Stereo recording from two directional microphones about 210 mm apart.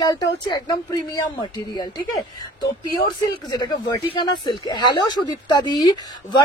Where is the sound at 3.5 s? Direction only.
20° left (ahead or behind).